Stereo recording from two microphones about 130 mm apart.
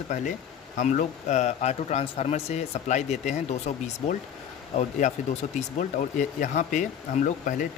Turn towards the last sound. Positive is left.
turn(degrees=85)